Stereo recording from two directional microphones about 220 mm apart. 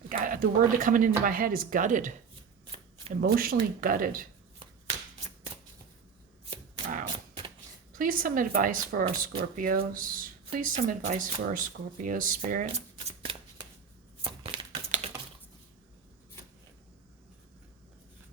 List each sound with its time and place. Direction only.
0.1 s speech: 40° right (ahead or behind)
3.3 s speech: 40° right (ahead or behind)
6.4 s shuffling cards: 30° right (ahead or behind)
7.9 s speech: 40° right (ahead or behind)
14.2 s a sound: 20° right (ahead or behind)